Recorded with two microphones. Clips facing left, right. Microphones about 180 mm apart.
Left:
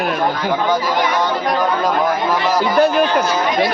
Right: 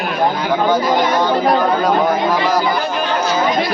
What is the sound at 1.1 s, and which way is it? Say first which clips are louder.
Speech: right 4 dB; 30° right (ahead or behind).